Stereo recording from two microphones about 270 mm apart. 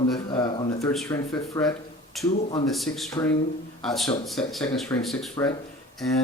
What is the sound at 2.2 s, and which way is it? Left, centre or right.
Speech, centre.